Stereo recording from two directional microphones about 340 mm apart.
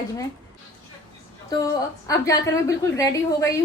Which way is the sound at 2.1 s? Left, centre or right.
Centre.